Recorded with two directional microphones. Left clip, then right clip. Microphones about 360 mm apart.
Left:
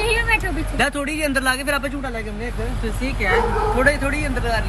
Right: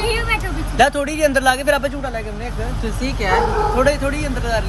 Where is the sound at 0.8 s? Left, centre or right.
Centre.